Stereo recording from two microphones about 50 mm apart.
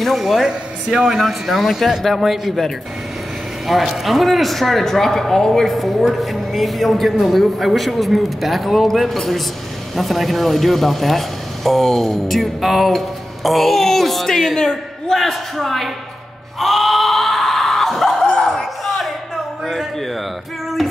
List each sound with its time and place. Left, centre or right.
0.0 s speech: centre
3.6 s speech: centre
16.5 s a sound: centre